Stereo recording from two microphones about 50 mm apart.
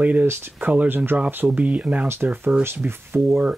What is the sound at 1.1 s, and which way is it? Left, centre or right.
Speech, right.